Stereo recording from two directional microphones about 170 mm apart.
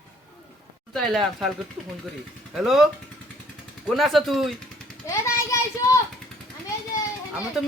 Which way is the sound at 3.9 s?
Centre (ahead or behind).